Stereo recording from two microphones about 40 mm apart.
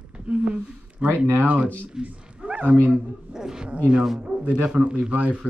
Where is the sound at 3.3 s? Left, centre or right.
Centre.